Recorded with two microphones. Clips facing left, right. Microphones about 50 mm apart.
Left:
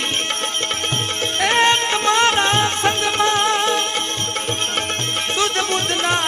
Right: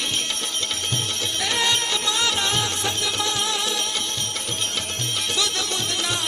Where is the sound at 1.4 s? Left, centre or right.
Left.